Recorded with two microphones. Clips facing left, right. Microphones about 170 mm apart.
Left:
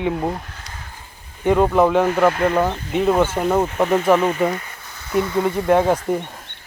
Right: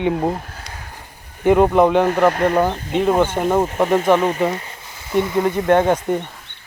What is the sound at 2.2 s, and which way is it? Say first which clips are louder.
Speech: right 1 dB; 35° right (ahead or behind).